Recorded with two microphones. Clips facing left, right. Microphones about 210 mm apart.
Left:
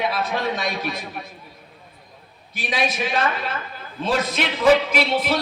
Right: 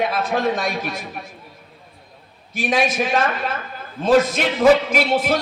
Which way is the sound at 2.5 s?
45° right (ahead or behind).